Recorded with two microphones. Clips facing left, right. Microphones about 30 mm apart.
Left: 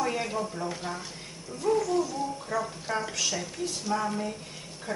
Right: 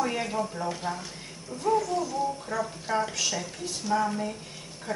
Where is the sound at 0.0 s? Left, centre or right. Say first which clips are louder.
Right 1 dB; centre.